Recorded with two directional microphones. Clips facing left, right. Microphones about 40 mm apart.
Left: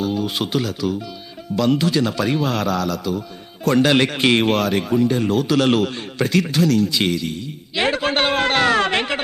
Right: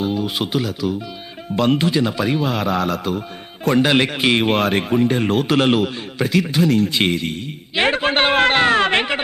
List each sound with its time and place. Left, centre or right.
0.1 s speech: centre
1.5 s speech: right
1.9 s a man's voice: centre
2.6 s speech: right
3.7 s a man's voice: centre
4.5 s speech: right
5.6 s a man's voice: centre
6.6 s speech: right